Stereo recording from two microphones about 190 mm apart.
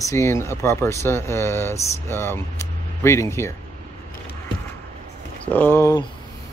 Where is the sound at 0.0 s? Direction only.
15° left (ahead or behind).